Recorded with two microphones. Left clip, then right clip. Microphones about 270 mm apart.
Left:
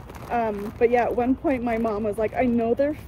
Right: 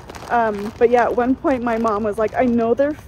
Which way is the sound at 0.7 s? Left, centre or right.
Centre.